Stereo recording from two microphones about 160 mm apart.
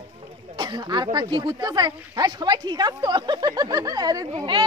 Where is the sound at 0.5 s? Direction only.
25° right (ahead or behind).